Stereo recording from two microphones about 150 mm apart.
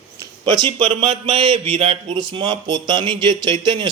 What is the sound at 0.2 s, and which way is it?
A man's voice, 30° right (ahead or behind).